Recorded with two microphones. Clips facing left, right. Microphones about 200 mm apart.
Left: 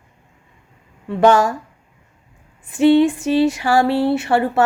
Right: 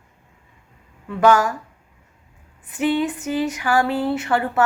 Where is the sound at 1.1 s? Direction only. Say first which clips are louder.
Left 3 dB; 30° left (ahead or behind).